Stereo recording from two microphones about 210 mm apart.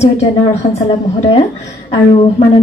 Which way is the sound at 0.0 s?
30° left (ahead or behind).